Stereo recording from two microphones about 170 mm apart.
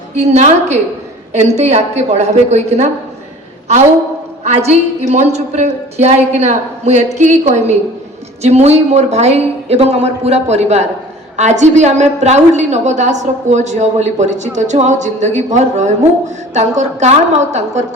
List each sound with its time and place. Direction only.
0.2 s a woman's voice: 40° right (ahead or behind)
4.4 s a woman's voice: 40° right (ahead or behind)